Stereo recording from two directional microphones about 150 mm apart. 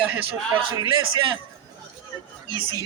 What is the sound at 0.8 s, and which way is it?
Speech, 35° right (ahead or behind).